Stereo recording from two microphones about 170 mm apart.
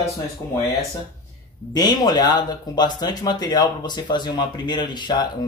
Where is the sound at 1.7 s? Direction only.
25° left (ahead or behind).